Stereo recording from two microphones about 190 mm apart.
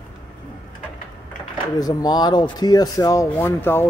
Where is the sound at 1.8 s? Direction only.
20° left (ahead or behind).